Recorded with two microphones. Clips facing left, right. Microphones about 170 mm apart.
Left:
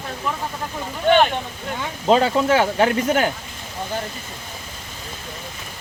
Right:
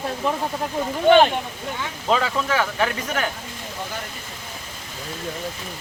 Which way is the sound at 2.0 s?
30° left (ahead or behind).